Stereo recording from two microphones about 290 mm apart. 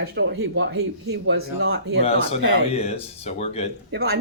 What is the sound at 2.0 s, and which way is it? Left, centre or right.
Speech, left.